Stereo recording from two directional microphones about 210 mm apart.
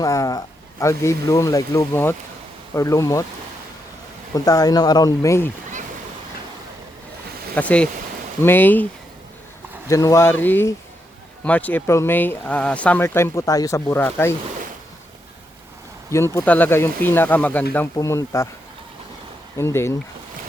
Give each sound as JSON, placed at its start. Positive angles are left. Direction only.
{"t": 0.0, "sound": "speech", "side_deg": 15}
{"t": 4.4, "sound": "speech", "side_deg": 15}
{"t": 7.5, "sound": "speech", "side_deg": 5}
{"t": 9.9, "sound": "speech", "side_deg": 15}
{"t": 16.1, "sound": "speech", "side_deg": 10}
{"t": 19.5, "sound": "speech", "side_deg": 10}